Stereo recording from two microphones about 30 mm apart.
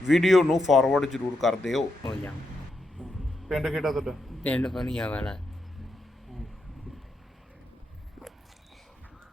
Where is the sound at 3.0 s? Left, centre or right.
Right.